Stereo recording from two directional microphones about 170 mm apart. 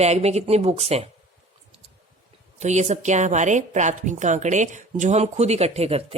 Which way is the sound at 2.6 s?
45° right (ahead or behind).